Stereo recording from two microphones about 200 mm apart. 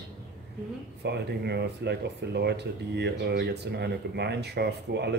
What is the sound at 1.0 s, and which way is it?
Speech, 55° right (ahead or behind).